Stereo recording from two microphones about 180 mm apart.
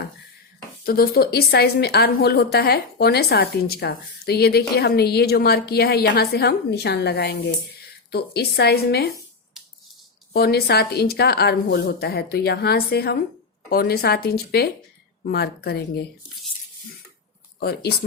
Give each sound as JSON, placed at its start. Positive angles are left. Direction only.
{"t": 0.9, "sound": "a woman's voice", "side_deg": 55}
{"t": 10.3, "sound": "a woman's voice", "side_deg": 60}
{"t": 17.6, "sound": "a woman's voice", "side_deg": 60}